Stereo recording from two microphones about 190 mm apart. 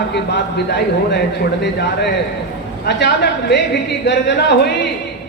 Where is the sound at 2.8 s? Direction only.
60° left (ahead or behind).